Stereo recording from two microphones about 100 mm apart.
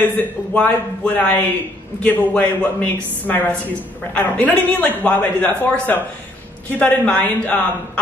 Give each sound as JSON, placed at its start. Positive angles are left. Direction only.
{"t": 0.6, "sound": "a woman's voice", "side_deg": 10}